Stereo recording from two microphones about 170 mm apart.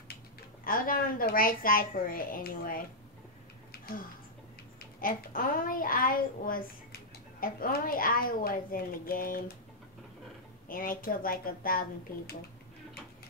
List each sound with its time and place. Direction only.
0.7 s speech: 55° left (ahead or behind)
5.0 s speech: 55° left (ahead or behind)
10.7 s speech: 55° left (ahead or behind)